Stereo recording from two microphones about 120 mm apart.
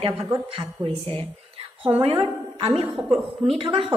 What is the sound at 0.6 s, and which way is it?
A woman's voice, 50° right (ahead or behind).